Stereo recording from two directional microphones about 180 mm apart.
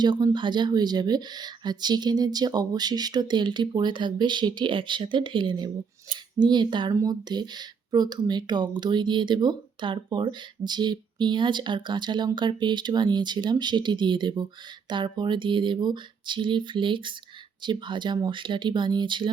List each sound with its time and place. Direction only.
0.0 s speech: 25° right (ahead or behind)